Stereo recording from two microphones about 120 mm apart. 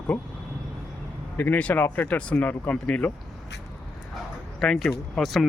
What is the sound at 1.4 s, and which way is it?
Speech, 15° left (ahead or behind).